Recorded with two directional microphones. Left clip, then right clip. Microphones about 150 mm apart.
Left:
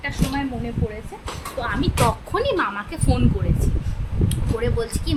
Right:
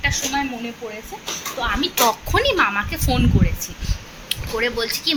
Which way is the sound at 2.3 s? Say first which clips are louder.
Right 4 dB; 10° left (ahead or behind).